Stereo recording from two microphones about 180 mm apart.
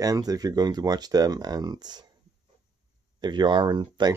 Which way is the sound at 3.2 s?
25° right (ahead or behind).